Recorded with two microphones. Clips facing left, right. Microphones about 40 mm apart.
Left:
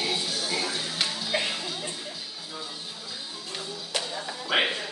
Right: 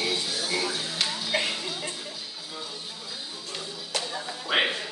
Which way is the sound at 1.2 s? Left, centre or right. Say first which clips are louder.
Right 1 dB; centre.